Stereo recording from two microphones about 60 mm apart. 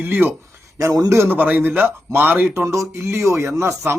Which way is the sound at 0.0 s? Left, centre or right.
Right.